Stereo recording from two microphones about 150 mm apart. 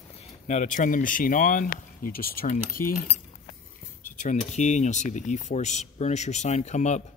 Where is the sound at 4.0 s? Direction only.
55° left (ahead or behind).